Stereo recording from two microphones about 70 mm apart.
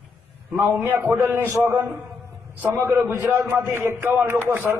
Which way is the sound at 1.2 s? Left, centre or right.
Right.